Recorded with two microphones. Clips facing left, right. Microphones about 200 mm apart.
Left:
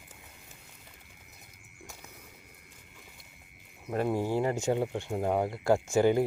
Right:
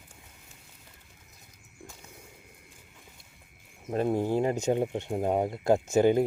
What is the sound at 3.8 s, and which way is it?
Speech, 20° right (ahead or behind).